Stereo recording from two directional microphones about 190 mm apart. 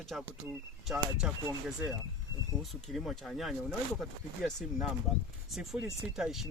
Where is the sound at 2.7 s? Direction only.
Centre (ahead or behind).